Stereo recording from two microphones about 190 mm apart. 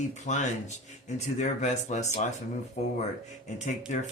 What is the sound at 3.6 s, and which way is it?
Speech, 40° left (ahead or behind).